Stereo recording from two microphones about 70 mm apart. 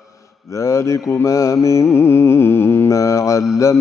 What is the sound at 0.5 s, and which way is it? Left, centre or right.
Mantra, left.